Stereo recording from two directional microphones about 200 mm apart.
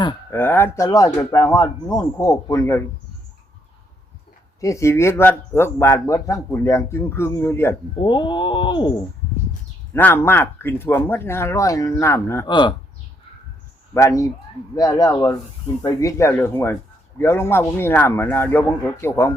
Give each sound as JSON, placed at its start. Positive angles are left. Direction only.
{"t": 0.3, "sound": "speech", "side_deg": 10}
{"t": 4.6, "sound": "speech", "side_deg": 15}
{"t": 8.0, "sound": "a sound", "side_deg": 25}
{"t": 9.9, "sound": "speech", "side_deg": 10}
{"t": 13.9, "sound": "speech", "side_deg": 15}